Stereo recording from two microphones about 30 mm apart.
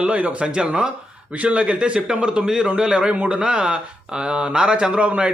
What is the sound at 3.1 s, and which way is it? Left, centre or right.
Speech, right.